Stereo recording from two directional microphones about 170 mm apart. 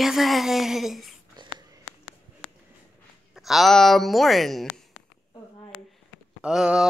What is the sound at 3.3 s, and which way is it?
Speech, centre (ahead or behind).